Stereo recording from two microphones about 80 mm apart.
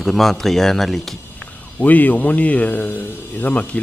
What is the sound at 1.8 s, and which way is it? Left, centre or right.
Speech, left.